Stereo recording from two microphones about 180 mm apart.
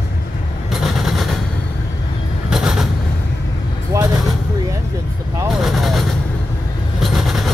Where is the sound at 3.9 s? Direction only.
15° right (ahead or behind).